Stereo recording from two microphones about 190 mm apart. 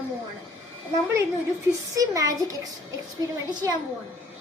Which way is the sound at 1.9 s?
20° right (ahead or behind).